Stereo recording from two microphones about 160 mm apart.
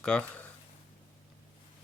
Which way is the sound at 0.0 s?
5° left (ahead or behind).